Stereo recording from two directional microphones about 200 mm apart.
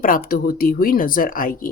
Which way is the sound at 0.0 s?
45° left (ahead or behind).